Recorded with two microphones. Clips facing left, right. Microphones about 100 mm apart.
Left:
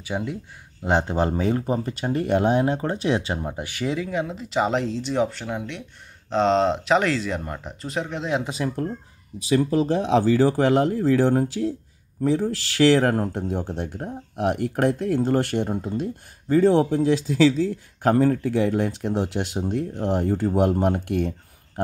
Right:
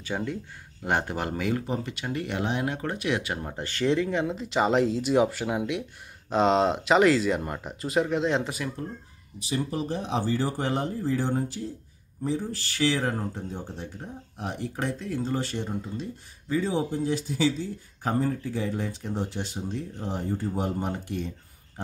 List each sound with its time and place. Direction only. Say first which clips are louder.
0.0 s speech: left 2 dB; 15° left (ahead or behind); by 3.3 s 30° left (ahead or behind)
3.3 s speech: left 2 dB; 15° left (ahead or behind)
9.8 s speech: left 9 dB; 90° left; by 16.7 s 50° left (ahead or behind)
16.7 s speech: left 8 dB; 90° left; by 21.9 s 65° left (ahead or behind)